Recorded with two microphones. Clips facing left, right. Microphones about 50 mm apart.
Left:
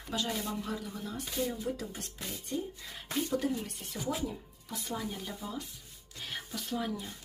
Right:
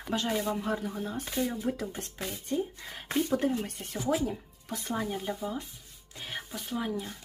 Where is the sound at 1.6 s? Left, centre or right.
Right.